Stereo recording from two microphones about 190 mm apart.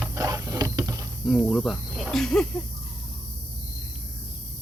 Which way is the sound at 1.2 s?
Centre (ahead or behind).